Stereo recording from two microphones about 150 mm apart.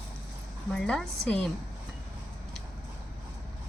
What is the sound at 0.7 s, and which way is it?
Speech, 5° left (ahead or behind).